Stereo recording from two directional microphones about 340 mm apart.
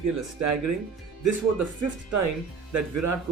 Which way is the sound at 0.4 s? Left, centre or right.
Right.